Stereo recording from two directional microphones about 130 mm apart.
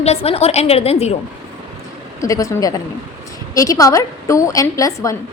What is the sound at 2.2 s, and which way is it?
A woman's voice, 25° left (ahead or behind).